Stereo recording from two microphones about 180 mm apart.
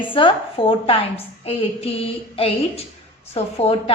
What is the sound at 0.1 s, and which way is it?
A woman's voice, 30° left (ahead or behind).